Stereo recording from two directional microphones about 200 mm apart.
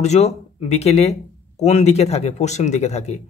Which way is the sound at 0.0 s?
35° left (ahead or behind).